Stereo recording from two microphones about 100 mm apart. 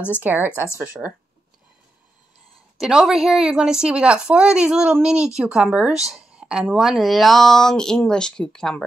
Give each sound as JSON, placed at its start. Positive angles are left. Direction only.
{"t": 0.2, "sound": "speech", "side_deg": -20}
{"t": 2.8, "sound": "a woman's voice", "side_deg": -5}